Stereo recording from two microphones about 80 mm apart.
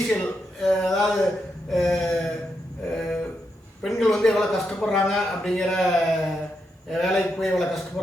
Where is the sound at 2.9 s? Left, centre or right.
Centre.